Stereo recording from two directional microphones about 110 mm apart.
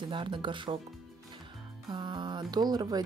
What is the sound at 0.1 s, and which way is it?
Speech, 45° right (ahead or behind).